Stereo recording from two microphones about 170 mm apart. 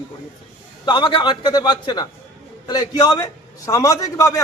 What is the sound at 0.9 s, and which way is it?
A man's voice, 25° left (ahead or behind).